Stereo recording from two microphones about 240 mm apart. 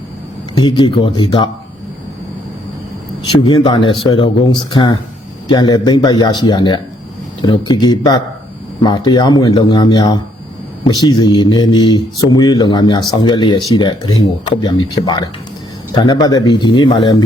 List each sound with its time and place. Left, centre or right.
0.6 s speech: centre
3.3 s speech: centre